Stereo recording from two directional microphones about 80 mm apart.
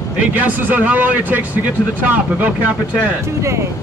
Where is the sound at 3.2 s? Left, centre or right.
Right.